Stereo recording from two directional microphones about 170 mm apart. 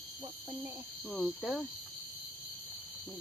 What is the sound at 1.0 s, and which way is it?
Speech, centre (ahead or behind).